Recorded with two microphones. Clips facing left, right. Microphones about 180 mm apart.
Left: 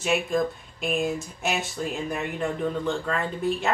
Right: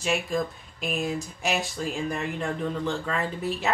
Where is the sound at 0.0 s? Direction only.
Centre (ahead or behind).